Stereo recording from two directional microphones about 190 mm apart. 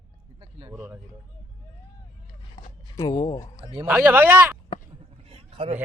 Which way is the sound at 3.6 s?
25° right (ahead or behind).